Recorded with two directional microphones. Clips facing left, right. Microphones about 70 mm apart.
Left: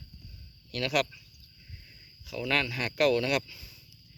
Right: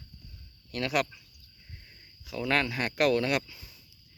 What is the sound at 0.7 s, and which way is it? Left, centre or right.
Speech, right.